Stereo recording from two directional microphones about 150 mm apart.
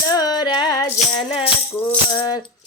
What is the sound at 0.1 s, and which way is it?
Music, 25° left (ahead or behind).